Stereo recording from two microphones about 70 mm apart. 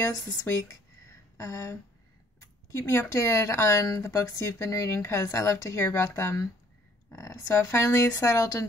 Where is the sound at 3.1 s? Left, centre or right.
Left.